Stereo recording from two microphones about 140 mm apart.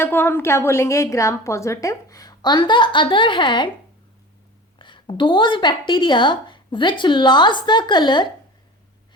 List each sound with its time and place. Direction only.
0.0 s a woman's voice: 15° left (ahead or behind); by 3.7 s 35° left (ahead or behind)
4.8 s a woman's voice: 35° left (ahead or behind)